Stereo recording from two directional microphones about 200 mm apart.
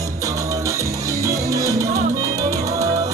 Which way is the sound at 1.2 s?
15° right (ahead or behind).